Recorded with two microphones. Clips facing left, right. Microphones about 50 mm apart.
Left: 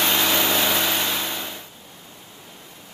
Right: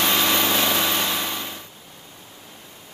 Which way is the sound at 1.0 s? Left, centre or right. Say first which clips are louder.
Right 1 dB; centre.